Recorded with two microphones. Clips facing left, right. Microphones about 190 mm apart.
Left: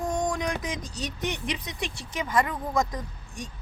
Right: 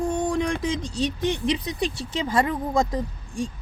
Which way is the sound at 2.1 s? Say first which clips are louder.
Right 2 dB; 30° right (ahead or behind).